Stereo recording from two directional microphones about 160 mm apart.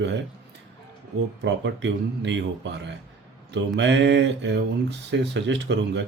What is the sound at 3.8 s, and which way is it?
Speech, 90° right.